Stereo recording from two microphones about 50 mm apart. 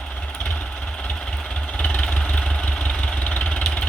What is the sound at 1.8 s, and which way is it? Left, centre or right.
Vehicle, left.